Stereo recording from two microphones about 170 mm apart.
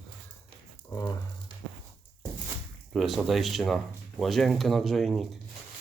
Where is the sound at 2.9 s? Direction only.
Centre (ahead or behind).